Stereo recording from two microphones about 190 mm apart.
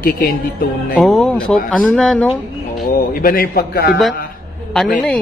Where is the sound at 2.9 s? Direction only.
50° left (ahead or behind).